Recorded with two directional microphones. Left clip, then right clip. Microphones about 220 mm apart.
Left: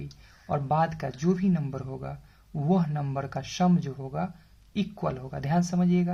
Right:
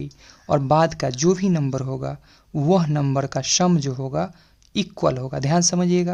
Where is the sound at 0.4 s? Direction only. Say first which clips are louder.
Right 8 dB; 50° right (ahead or behind).